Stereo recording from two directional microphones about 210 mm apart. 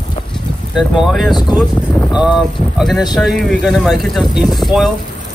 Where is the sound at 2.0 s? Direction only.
5° right (ahead or behind).